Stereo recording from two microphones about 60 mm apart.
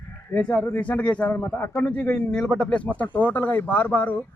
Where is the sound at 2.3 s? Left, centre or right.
Centre.